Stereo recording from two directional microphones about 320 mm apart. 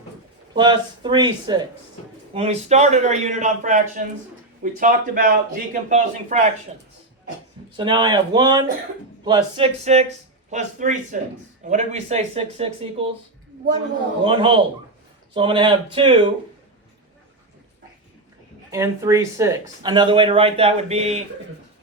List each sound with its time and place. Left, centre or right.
0.5 s a man's voice: centre
7.8 s a man's voice: centre
14.3 s speech: centre
18.7 s speech: centre